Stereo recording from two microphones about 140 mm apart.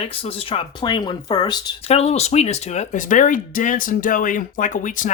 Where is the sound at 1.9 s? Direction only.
50° left (ahead or behind); by 5.1 s 65° left (ahead or behind).